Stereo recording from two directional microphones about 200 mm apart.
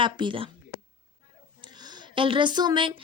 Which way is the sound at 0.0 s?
25° right (ahead or behind).